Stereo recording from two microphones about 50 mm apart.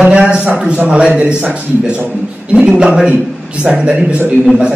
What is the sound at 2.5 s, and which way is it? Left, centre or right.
A man's voice, centre.